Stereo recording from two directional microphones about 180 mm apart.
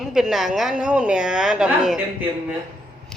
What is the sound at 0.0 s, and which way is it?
A woman's voice, centre (ahead or behind).